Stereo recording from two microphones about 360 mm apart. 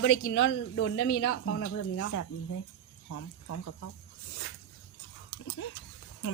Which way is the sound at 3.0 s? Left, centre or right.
Left.